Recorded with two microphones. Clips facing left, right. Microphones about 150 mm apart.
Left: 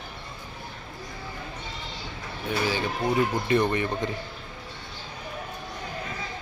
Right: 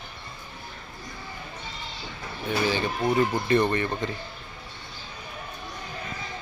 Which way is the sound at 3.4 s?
10° left (ahead or behind).